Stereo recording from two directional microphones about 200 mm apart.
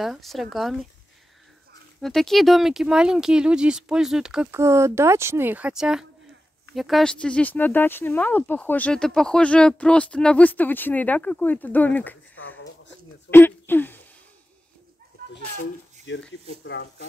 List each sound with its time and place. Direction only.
0.0 s speech: centre (ahead or behind)
2.0 s speech: centre (ahead or behind)
13.3 s speech: 10° left (ahead or behind)
15.3 s a sound: 65° left (ahead or behind)
16.6 s speech: 65° left (ahead or behind)